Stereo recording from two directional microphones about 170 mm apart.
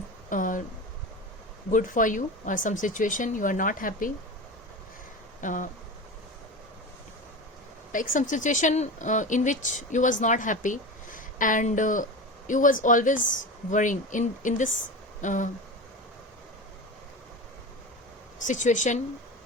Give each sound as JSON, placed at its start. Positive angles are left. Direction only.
{"t": 0.3, "sound": "speech", "side_deg": 50}
{"t": 1.7, "sound": "speech", "side_deg": 50}
{"t": 5.4, "sound": "speech", "side_deg": 50}
{"t": 7.9, "sound": "speech", "side_deg": 50}
{"t": 15.2, "sound": "a sound", "side_deg": 50}
{"t": 18.4, "sound": "speech", "side_deg": 45}